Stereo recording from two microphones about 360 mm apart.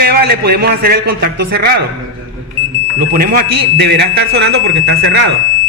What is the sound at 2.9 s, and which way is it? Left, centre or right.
Speech, right.